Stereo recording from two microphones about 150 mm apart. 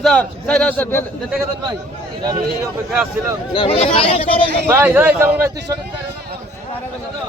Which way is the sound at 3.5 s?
40° left (ahead or behind).